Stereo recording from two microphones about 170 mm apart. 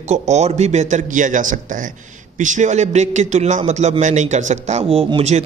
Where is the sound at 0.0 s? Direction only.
40° right (ahead or behind).